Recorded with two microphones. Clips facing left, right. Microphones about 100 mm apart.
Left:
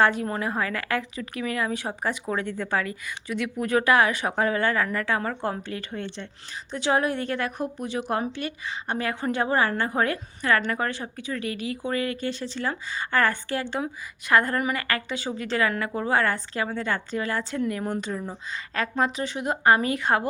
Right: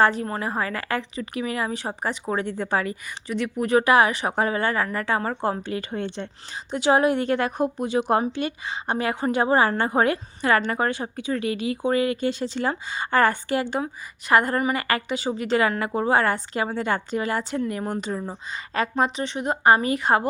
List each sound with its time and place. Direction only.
0.0 s a woman's voice: 5° left (ahead or behind); by 19.0 s 20° right (ahead or behind)
19.1 s a woman's voice: 5° left (ahead or behind)